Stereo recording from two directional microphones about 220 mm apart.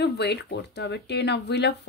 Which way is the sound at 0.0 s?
50° left (ahead or behind).